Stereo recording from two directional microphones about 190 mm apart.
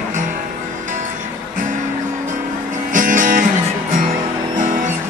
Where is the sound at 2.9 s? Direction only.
45° right (ahead or behind).